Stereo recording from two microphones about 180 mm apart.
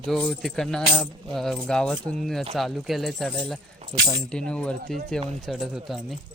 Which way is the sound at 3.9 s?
35° right (ahead or behind).